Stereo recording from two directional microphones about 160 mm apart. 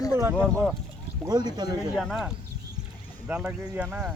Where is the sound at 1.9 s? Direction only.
Centre (ahead or behind).